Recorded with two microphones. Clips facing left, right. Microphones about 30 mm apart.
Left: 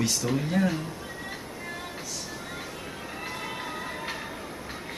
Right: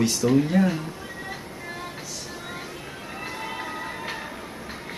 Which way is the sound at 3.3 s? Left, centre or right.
Centre.